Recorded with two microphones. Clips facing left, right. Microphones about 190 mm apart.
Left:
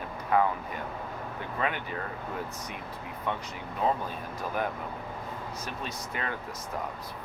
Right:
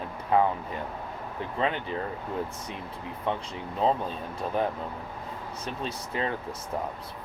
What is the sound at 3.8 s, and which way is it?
Speech, 25° right (ahead or behind).